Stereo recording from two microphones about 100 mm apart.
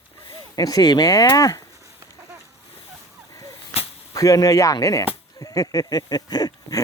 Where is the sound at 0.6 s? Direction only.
40° left (ahead or behind).